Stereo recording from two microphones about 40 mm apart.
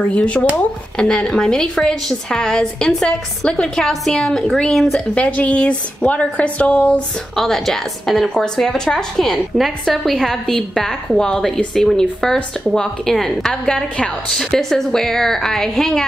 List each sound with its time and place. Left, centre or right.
0.0 s a woman's voice: left
0.9 s a woman's voice: centre
5.1 s a woman's voice: left
7.3 s a woman's voice: centre
8.6 s a woman's voice: centre